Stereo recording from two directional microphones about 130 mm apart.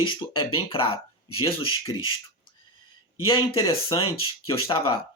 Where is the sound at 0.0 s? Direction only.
40° left (ahead or behind).